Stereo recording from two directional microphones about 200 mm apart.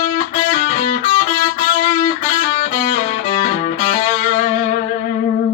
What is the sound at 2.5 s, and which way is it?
Music, 30° left (ahead or behind).